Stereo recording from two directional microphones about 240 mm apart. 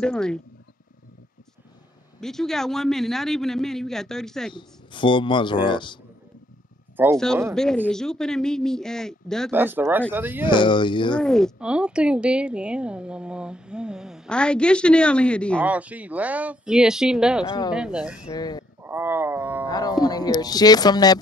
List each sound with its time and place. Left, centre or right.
0.0 s a woman's voice: centre
2.1 s a woman's voice: centre
4.6 s speech: centre
7.0 s speech: centre
7.5 s a woman's voice: centre
9.5 s speech: centre
10.4 s speech: centre
11.1 s a woman's voice: centre
15.6 s a woman's voice: centre
17.5 s speech: centre
17.7 s a woman's voice: centre
18.2 s speech: centre
18.8 s wild animals: centre
19.7 s music: centre